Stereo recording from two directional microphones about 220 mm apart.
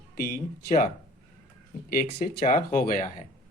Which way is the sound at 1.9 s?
40° left (ahead or behind).